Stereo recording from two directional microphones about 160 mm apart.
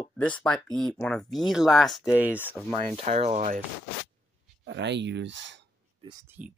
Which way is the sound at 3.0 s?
45° right (ahead or behind).